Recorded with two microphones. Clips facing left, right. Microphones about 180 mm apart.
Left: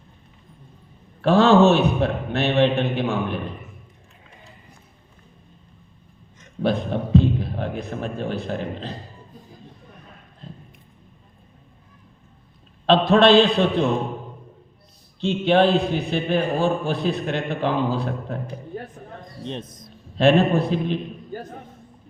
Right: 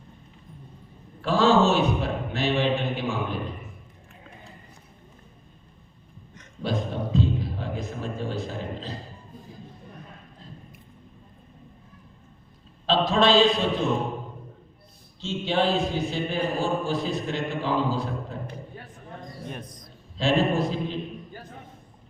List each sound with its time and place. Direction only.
1.2 s a man's voice: 65° left (ahead or behind)
6.6 s a sound: 60° left (ahead or behind)
12.8 s a man's voice: 60° left (ahead or behind)
15.2 s mantra: 60° left (ahead or behind)
19.5 s speech: 25° left (ahead or behind)
20.1 s a man's voice: 60° left (ahead or behind)